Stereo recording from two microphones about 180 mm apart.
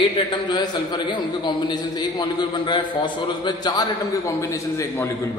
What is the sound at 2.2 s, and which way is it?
A man's voice, 25° left (ahead or behind).